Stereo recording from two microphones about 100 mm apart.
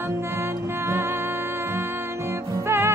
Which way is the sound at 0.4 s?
25° right (ahead or behind).